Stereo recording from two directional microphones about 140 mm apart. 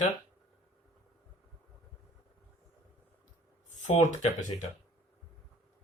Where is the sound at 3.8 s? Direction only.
60° left (ahead or behind).